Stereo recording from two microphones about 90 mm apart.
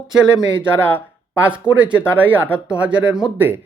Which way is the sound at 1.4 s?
15° right (ahead or behind).